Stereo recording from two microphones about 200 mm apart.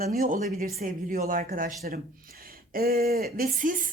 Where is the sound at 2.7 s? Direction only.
50° right (ahead or behind).